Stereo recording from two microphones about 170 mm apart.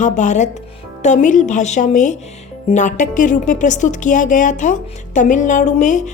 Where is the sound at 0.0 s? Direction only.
45° left (ahead or behind).